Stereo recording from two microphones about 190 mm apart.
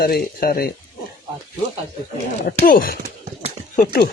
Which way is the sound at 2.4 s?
50° left (ahead or behind).